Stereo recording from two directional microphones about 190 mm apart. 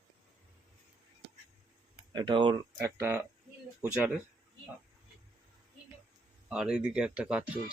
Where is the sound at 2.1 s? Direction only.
25° right (ahead or behind).